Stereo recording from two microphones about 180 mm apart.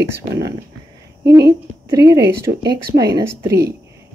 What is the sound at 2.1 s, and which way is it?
Speech, 65° right (ahead or behind).